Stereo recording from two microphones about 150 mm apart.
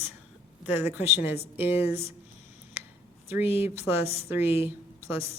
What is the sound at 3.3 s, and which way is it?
A woman's voice, 15° right (ahead or behind).